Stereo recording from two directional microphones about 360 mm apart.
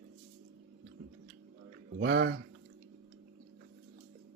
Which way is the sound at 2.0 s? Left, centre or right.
Right.